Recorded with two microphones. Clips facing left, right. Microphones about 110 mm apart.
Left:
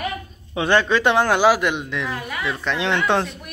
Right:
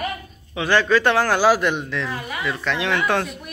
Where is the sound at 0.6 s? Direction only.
20° left (ahead or behind).